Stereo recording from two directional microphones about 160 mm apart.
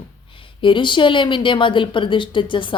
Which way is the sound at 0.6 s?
30° left (ahead or behind).